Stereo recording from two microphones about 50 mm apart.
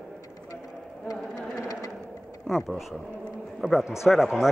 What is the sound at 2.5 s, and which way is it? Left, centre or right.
Speech, centre.